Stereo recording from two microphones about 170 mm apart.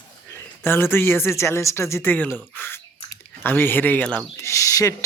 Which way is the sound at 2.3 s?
10° left (ahead or behind).